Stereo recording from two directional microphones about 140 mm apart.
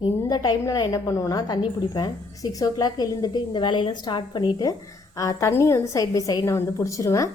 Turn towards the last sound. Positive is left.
turn(degrees=25)  # may be behind; listen again after turning